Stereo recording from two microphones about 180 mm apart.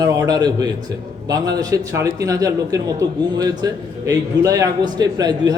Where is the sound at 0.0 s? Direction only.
20° right (ahead or behind).